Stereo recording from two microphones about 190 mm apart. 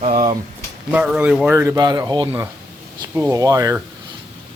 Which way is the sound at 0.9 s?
5° right (ahead or behind).